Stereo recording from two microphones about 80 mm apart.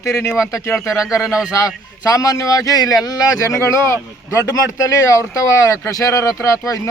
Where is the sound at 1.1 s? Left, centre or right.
Centre.